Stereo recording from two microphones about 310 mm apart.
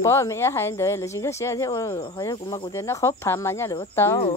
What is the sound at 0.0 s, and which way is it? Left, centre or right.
Speech, centre.